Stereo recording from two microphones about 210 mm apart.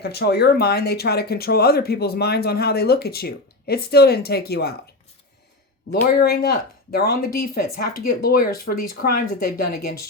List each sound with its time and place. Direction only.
0.0 s speech: 50° left (ahead or behind)
5.9 s speech: 45° left (ahead or behind)